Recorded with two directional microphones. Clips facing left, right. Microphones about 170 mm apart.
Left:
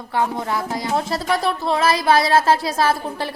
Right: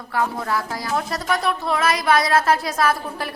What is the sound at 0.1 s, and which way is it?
Speech, 25° left (ahead or behind).